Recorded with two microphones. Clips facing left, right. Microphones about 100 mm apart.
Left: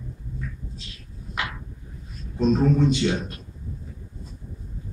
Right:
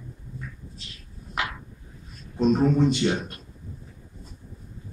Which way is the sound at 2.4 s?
15° right (ahead or behind).